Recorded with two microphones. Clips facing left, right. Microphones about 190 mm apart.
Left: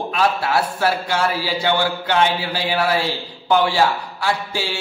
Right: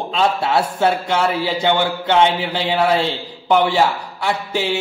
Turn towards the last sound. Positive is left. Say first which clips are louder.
# right 3 dB
turn(degrees=-20)  # may be behind; listen again after turning